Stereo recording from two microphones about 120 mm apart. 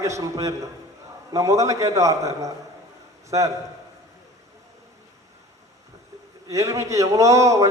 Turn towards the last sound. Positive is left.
turn(degrees=-25)  # may be behind; listen again after turning